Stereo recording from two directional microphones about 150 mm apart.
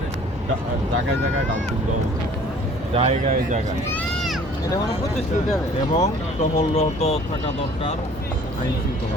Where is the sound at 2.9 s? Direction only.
45° right (ahead or behind).